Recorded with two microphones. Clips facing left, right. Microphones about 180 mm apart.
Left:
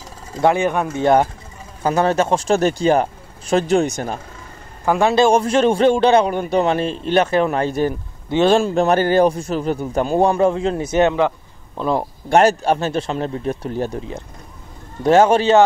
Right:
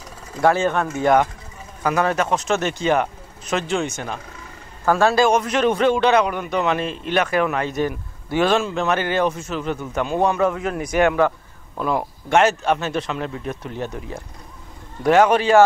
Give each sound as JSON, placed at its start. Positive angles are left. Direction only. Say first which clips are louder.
{"t": 0.3, "sound": "speech", "louder": "left 1 dB", "side_deg": 20}
{"t": 0.8, "sound": "a man's voice", "louder": "left 3 dB", "side_deg": 30}
{"t": 4.8, "sound": "speech", "louder": "left 1 dB", "side_deg": 15}
{"t": 5.2, "sound": "a man's voice", "louder": "left 3 dB", "side_deg": 30}
{"t": 15.0, "sound": "a man's voice", "louder": "left 2 dB", "side_deg": 30}